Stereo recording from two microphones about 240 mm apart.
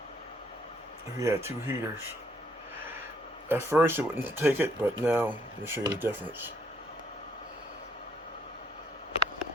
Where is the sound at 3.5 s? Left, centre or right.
Centre.